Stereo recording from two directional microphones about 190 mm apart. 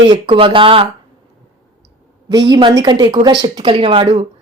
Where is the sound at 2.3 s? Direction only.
20° right (ahead or behind).